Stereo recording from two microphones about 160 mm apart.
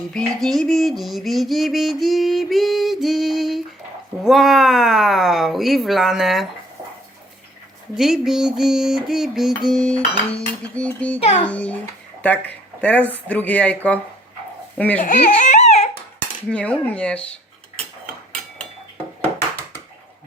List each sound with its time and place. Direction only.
0.1 s music: 5° left (ahead or behind)
7.9 s music: centre (ahead or behind)
9.9 s speech: 5° left (ahead or behind)
11.2 s a child's voice: 40° left (ahead or behind)
11.4 s speech: 10° left (ahead or behind)
15.0 s baby cry: 55° left (ahead or behind)
16.5 s speech: 10° left (ahead or behind)